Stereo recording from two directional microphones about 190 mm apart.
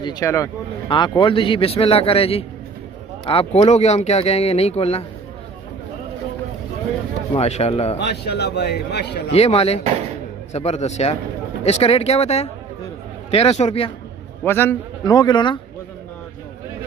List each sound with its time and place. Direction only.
0.0 s a man's voice: 20° left (ahead or behind)
7.3 s speech: 35° left (ahead or behind)
7.9 s a man's voice: 60° left (ahead or behind)
9.3 s speech: 35° left (ahead or behind)
14.4 s a man's voice: 10° left (ahead or behind)